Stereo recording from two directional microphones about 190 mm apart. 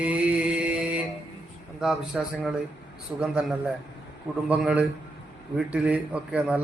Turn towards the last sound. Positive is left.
turn(degrees=-5)  # may be behind; listen again after turning